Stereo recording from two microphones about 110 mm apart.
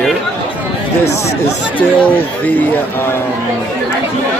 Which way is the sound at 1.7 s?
15° left (ahead or behind).